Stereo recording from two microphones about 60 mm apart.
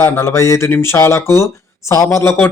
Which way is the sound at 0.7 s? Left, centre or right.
Left.